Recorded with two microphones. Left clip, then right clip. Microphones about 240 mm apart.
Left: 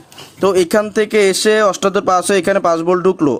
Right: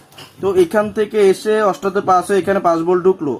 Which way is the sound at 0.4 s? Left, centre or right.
Left.